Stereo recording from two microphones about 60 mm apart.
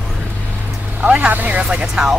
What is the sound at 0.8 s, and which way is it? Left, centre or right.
Speech, right.